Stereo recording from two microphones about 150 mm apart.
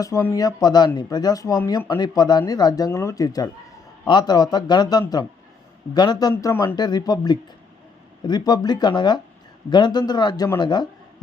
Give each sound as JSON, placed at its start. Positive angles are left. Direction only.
{"t": 0.0, "sound": "speech", "side_deg": 20}